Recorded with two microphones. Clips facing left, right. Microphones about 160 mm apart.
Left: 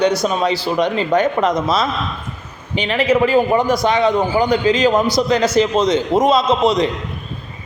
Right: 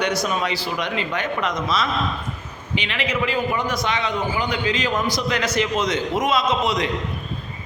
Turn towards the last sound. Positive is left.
turn(degrees=30)  # may be behind; listen again after turning